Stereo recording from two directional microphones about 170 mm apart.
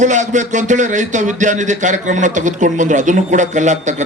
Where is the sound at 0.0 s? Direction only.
45° right (ahead or behind).